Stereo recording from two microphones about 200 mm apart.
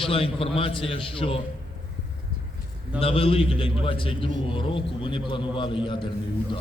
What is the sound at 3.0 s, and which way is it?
A man's voice, 30° left (ahead or behind).